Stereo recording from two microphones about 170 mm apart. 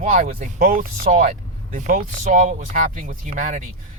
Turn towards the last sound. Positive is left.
turn(degrees=-45)  # may be behind; listen again after turning